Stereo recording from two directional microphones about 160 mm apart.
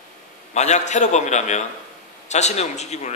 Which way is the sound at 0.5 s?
45° left (ahead or behind).